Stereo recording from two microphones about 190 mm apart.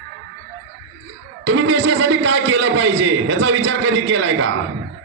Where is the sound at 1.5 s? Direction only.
80° right.